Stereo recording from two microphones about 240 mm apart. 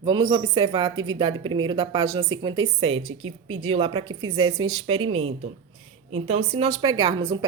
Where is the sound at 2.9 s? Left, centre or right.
Right.